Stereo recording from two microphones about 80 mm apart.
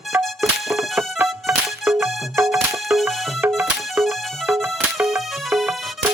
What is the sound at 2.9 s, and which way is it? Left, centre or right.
Music, centre.